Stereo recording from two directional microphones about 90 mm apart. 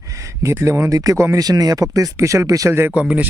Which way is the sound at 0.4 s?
35° right (ahead or behind).